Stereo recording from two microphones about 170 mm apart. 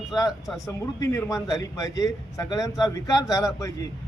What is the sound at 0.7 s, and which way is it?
A man's voice, 20° left (ahead or behind).